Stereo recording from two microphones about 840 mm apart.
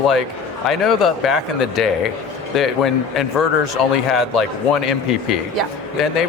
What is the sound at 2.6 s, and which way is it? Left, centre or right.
Speech, centre.